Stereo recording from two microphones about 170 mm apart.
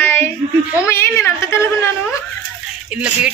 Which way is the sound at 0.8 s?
15° left (ahead or behind).